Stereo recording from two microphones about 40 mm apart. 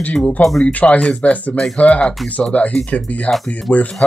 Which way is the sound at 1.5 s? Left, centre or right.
Centre.